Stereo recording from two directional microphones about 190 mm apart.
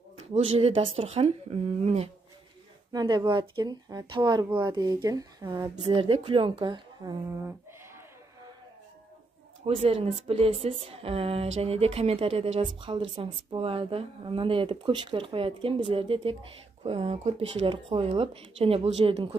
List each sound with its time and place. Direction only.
0.6 s speech: 30° right (ahead or behind)
2.9 s a woman's voice: 20° right (ahead or behind)
9.8 s a woman's voice: 30° right (ahead or behind)